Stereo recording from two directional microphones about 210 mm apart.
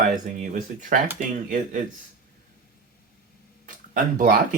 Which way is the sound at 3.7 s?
40° right (ahead or behind).